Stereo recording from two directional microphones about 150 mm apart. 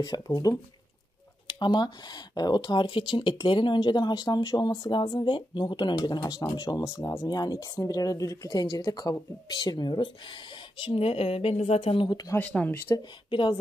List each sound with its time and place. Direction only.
0.0 s speech: 25° left (ahead or behind)
12.4 s speech: 10° left (ahead or behind)
13.3 s speech: 35° left (ahead or behind)